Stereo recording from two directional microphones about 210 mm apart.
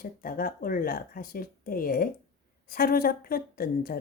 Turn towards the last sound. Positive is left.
turn(degrees=45)  # may be behind; listen again after turning